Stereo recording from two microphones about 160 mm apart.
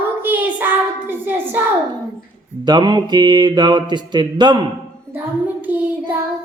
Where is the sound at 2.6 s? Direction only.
25° right (ahead or behind).